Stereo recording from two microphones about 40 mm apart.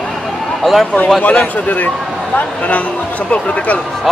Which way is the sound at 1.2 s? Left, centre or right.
Left.